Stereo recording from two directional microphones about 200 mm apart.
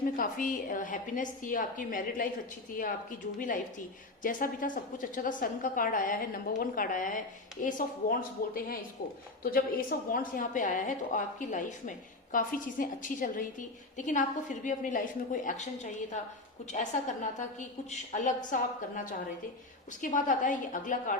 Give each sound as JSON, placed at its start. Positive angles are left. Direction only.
{"t": 0.2, "sound": "a woman's voice", "side_deg": 40}